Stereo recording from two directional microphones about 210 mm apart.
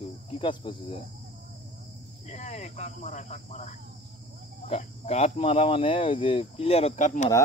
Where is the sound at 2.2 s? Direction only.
35° left (ahead or behind).